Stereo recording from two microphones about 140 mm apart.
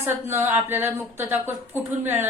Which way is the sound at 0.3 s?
15° right (ahead or behind).